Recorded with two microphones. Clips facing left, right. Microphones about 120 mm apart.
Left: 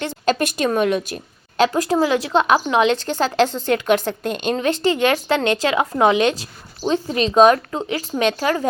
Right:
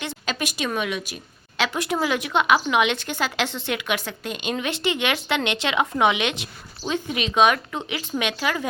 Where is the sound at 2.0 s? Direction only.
30° left (ahead or behind).